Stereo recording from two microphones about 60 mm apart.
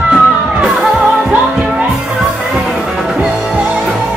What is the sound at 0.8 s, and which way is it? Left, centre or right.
Music, centre.